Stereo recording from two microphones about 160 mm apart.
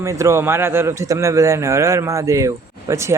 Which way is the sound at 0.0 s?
20° right (ahead or behind).